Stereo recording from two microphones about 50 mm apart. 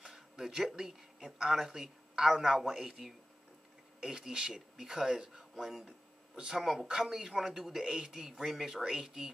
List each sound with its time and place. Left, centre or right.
0.0 s speech: centre
6.6 s speech: centre